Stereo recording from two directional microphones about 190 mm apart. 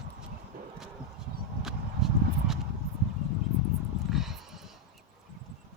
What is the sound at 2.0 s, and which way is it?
Horse, centre (ahead or behind).